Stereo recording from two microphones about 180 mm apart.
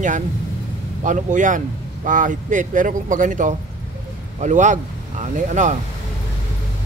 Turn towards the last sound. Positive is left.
turn(degrees=-40)  # may be behind; listen again after turning